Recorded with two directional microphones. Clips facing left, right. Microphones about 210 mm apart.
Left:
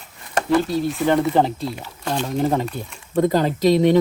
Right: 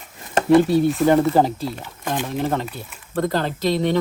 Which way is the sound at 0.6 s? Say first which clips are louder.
Right 4 dB; centre (ahead or behind).